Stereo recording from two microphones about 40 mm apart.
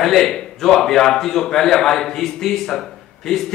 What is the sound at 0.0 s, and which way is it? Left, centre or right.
A man's voice, centre.